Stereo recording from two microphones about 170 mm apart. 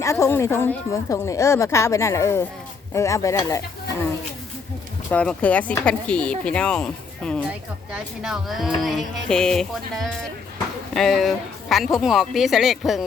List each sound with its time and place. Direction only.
0.0 s a woman's voice: 15° left (ahead or behind)
5.1 s a woman's voice: 5° left (ahead or behind)